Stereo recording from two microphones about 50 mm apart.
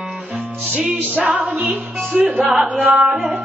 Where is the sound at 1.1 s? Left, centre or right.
Right.